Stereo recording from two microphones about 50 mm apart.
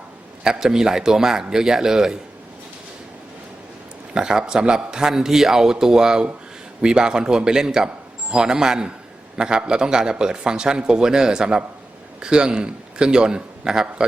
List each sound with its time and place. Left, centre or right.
0.4 s a man's voice: centre
4.1 s a man's voice: centre